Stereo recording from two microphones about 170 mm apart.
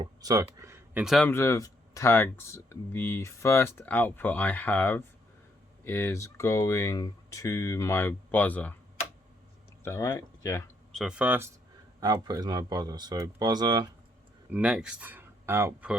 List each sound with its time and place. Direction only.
0.0 s a sound: 20° right (ahead or behind)
1.0 s speech: centre (ahead or behind)
1.3 s speech: 15° left (ahead or behind)
9.8 s speech: 15° left (ahead or behind)
10.9 s speech: 5° right (ahead or behind)
11.9 s speech: 25° right (ahead or behind)
14.5 s speech: 5° right (ahead or behind)